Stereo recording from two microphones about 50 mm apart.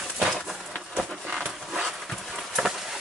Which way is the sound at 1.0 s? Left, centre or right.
Centre.